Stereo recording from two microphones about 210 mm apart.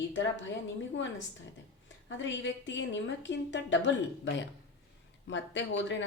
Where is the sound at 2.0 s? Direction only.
60° left (ahead or behind).